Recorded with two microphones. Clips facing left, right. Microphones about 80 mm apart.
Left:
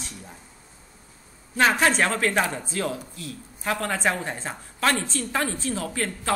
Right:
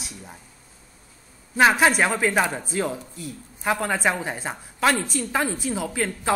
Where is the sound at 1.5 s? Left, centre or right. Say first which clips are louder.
Right 3 dB; centre.